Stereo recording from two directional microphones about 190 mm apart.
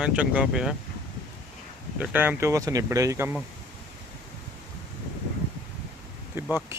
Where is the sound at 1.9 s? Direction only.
10° right (ahead or behind).